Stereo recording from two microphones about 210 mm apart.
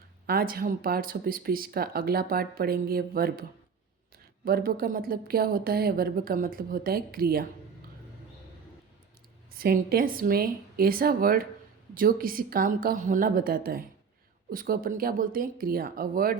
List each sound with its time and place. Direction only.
0.3 s speech: 45° right (ahead or behind)
4.4 s speech: 45° right (ahead or behind)
9.5 s speech: 45° right (ahead or behind)